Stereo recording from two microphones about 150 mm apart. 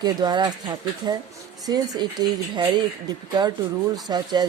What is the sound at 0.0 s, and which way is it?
Speech, 30° right (ahead or behind).